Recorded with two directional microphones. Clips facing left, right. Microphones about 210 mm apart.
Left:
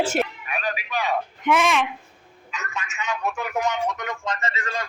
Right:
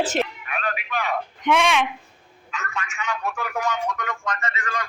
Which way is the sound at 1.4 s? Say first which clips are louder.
Right 1 dB; centre (ahead or behind).